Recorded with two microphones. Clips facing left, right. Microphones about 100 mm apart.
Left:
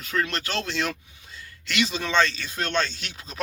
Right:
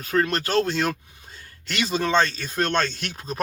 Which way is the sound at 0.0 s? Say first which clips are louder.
Right 5 dB; 45° right (ahead or behind).